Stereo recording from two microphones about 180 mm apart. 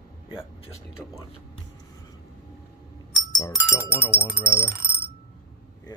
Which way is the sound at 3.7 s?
15° left (ahead or behind).